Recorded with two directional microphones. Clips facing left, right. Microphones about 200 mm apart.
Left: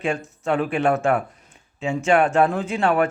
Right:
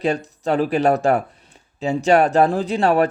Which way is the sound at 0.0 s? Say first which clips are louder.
Right 4 dB; 35° right (ahead or behind).